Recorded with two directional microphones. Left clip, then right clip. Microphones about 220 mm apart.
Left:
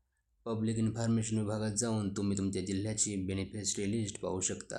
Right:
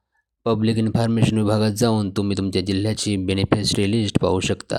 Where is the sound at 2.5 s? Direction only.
35° right (ahead or behind).